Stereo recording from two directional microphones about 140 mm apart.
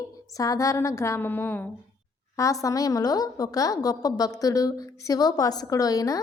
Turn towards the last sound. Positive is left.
turn(degrees=25)  # may be behind; listen again after turning